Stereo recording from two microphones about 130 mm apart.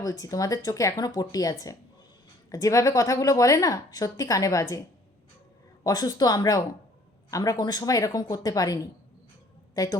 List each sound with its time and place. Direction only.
0.0 s a woman's voice: 30° left (ahead or behind)
5.8 s a woman's voice: 30° left (ahead or behind)